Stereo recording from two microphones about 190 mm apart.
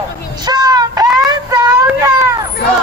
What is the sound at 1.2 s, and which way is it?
Child singing, 20° right (ahead or behind).